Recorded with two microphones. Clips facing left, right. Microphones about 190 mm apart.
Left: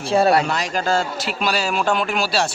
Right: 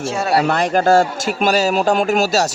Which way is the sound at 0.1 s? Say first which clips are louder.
Left 7 dB; 35° left (ahead or behind).